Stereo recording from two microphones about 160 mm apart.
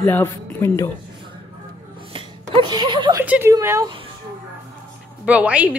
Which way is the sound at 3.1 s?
10° right (ahead or behind).